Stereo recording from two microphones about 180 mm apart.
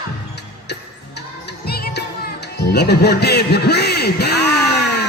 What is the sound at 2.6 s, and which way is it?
A man's voice, 65° left (ahead or behind).